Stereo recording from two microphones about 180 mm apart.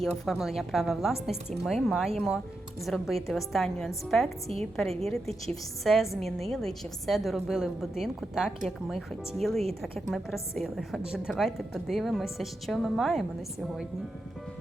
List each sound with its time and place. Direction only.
0.0 s a woman's voice: centre (ahead or behind)
4.4 s a woman's voice: 35° right (ahead or behind)
4.9 s a woman's voice: centre (ahead or behind)